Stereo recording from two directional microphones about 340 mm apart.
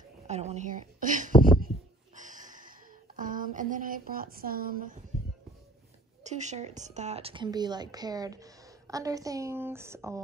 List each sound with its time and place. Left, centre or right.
0.3 s a sound: centre
3.2 s speech: right
6.2 s a woman's voice: centre